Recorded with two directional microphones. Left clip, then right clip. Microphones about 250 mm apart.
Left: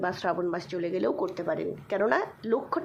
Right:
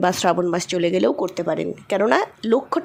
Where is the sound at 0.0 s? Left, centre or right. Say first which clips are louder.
Right 10 dB; right.